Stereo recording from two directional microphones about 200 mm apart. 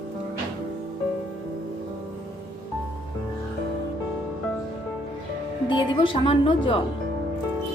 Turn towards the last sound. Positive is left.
turn(degrees=25)  # may be behind; listen again after turning